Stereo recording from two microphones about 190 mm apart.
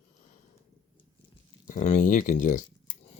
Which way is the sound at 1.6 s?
40° left (ahead or behind).